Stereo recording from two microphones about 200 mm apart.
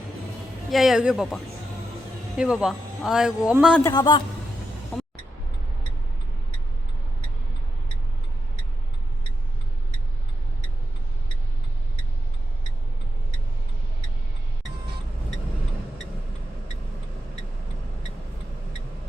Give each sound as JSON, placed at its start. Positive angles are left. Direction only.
{"t": 0.7, "sound": "speech", "side_deg": 0}
{"t": 3.8, "sound": "a man's voice", "side_deg": 20}